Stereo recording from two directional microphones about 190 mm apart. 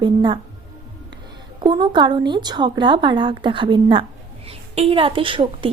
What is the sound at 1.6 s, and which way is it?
A woman's voice, 25° right (ahead or behind).